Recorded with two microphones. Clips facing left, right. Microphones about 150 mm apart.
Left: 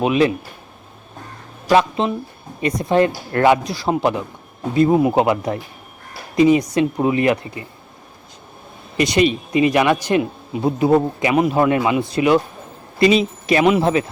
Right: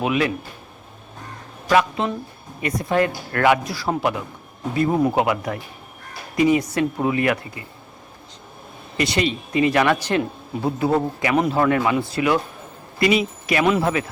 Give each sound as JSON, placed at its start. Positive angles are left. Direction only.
{"t": 0.0, "sound": "speech", "side_deg": 25}
{"t": 1.7, "sound": "speech", "side_deg": 25}
{"t": 9.0, "sound": "speech", "side_deg": 20}